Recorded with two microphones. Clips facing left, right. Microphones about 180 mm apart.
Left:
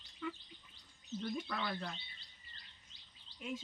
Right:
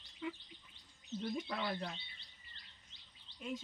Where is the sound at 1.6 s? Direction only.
20° right (ahead or behind).